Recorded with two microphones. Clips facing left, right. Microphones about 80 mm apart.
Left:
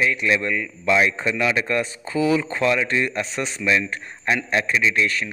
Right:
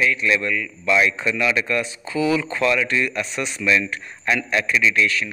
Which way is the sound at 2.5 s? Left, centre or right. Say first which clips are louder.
Even; left.